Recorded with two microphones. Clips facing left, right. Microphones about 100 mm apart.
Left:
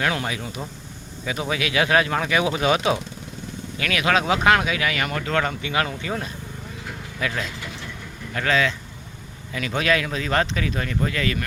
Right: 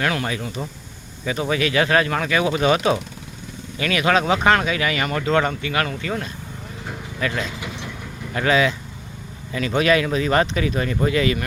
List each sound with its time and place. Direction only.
0.0 s speech: 15° left (ahead or behind); by 5.5 s 5° right (ahead or behind)
5.6 s speech: 15° left (ahead or behind)
7.2 s speech: centre (ahead or behind)
8.3 s speech: 10° right (ahead or behind)
9.5 s speech: centre (ahead or behind)